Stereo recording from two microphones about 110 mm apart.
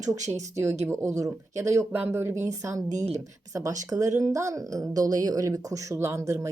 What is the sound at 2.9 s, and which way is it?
Speech, 90° right.